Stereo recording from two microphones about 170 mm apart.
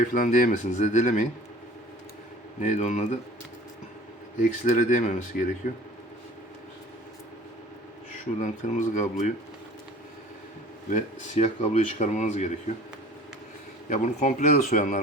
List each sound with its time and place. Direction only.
0.0 s speech: 50° left (ahead or behind)
2.6 s speech: 45° left (ahead or behind)
4.4 s speech: 45° left (ahead or behind)
8.1 s speech: 45° left (ahead or behind)
10.8 s speech: 45° left (ahead or behind)
13.9 s speech: 45° left (ahead or behind)